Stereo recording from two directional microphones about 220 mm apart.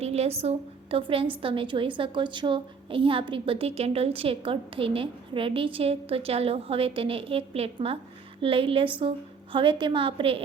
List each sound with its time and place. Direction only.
0.0 s a woman's voice: 30° right (ahead or behind)